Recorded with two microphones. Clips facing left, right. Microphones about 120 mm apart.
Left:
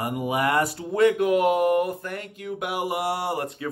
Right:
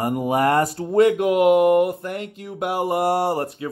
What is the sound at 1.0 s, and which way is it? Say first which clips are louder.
Speech: right 2 dB; 25° right (ahead or behind).